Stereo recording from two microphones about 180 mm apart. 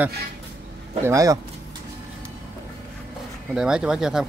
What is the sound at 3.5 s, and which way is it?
Speech, 5° right (ahead or behind).